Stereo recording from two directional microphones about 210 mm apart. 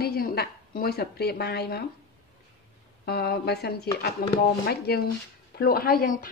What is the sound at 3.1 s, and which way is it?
Speech, 50° left (ahead or behind).